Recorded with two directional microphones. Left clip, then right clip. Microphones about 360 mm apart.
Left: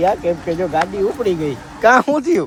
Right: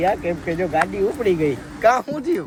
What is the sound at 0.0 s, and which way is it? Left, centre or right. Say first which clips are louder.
Speech: left 4 dB; centre.